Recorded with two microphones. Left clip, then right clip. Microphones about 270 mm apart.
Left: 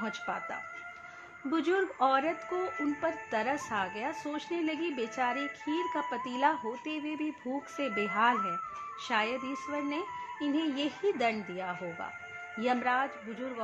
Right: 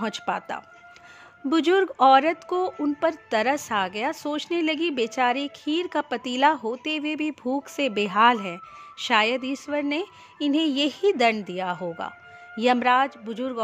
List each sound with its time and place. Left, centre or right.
0.0 s speech: right